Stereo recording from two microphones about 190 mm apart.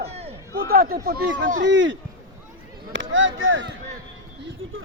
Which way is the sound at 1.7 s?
70° right (ahead or behind).